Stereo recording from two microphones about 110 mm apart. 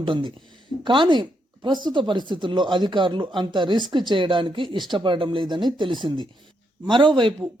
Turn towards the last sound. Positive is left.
turn(degrees=-45)  # may be behind; listen again after turning